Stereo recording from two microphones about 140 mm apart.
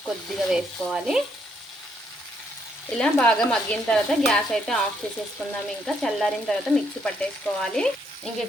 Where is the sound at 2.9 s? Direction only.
5° left (ahead or behind).